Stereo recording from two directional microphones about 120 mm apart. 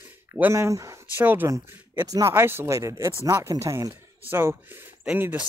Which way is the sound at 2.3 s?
20° right (ahead or behind).